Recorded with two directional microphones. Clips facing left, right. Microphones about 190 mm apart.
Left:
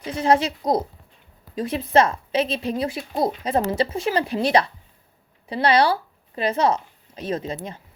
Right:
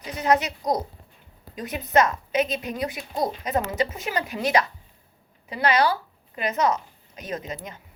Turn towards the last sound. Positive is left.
turn(degrees=30)  # may be behind; listen again after turning